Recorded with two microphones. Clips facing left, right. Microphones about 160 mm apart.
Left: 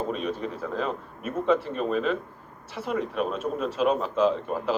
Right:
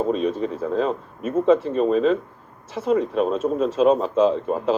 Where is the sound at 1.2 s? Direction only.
20° right (ahead or behind).